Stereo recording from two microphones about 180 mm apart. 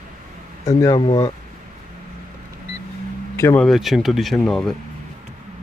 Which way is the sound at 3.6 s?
Centre (ahead or behind).